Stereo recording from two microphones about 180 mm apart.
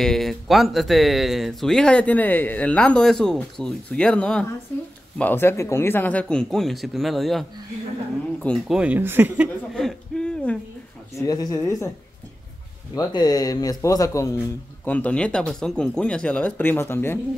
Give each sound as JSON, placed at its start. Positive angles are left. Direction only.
{"t": 0.0, "sound": "speech", "side_deg": 0}
{"t": 8.7, "sound": "speech", "side_deg": -10}
{"t": 9.8, "sound": "hoot", "side_deg": 5}
{"t": 11.1, "sound": "a man's voice", "side_deg": 20}
{"t": 12.9, "sound": "a man's voice", "side_deg": 20}